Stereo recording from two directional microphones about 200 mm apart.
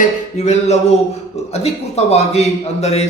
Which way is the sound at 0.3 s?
35° left (ahead or behind).